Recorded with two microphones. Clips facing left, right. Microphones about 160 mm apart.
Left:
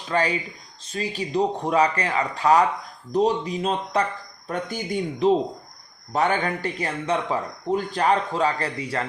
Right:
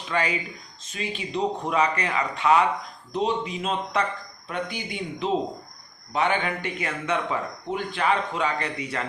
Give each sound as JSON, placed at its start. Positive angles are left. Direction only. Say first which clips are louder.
{"t": 0.1, "sound": "speech", "louder": "left 3 dB", "side_deg": 35}